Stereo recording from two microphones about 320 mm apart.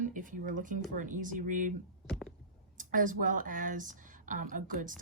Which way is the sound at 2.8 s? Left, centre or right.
Right.